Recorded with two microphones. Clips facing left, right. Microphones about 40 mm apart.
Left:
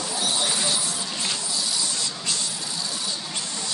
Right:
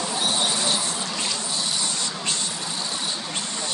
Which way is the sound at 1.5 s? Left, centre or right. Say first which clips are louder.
Right 1 dB; right.